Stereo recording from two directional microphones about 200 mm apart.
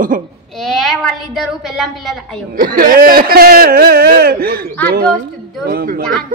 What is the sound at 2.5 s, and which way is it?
Speech, 45° right (ahead or behind).